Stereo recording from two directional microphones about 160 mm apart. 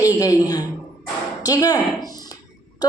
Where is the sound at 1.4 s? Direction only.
25° left (ahead or behind).